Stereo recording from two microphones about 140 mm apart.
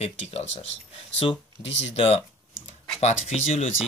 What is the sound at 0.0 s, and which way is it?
Speech, 45° left (ahead or behind).